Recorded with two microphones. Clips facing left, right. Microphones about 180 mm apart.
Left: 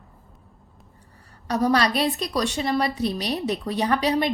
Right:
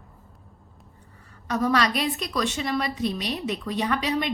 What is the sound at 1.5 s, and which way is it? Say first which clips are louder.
A woman's voice: left 2 dB; 35° left (ahead or behind).